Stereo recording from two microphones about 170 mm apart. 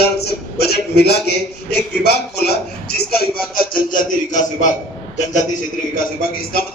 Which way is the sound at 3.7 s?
50° left (ahead or behind).